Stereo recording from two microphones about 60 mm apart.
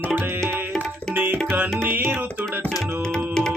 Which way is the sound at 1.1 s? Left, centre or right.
Right.